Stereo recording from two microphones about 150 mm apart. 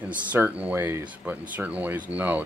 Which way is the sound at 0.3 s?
10° right (ahead or behind).